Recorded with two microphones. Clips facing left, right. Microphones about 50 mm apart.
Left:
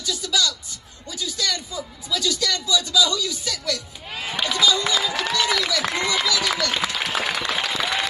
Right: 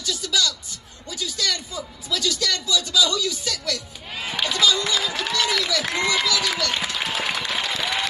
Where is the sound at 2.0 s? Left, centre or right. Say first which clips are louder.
Left 1 dB; right.